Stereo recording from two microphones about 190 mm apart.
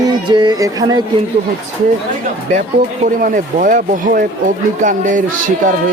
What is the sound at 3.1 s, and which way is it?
Speech, 45° right (ahead or behind).